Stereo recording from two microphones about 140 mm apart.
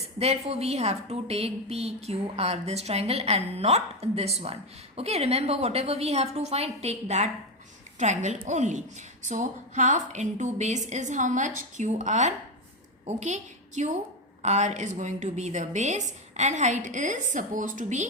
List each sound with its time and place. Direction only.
0.2 s a woman's voice: 50° right (ahead or behind)